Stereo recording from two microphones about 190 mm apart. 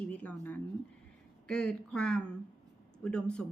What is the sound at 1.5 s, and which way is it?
Speech, 5° left (ahead or behind).